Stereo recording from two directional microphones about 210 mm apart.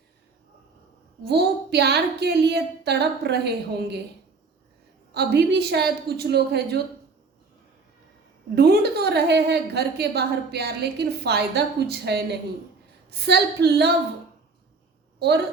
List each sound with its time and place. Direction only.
1.2 s a woman's voice: 50° right (ahead or behind)
5.1 s a woman's voice: 50° right (ahead or behind)
8.5 s a woman's voice: 50° right (ahead or behind)